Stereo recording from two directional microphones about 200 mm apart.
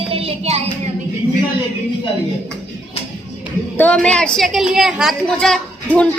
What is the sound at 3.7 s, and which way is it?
A woman's voice, 5° left (ahead or behind).